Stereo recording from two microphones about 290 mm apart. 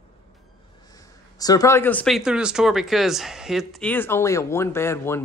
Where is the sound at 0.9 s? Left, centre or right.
Centre.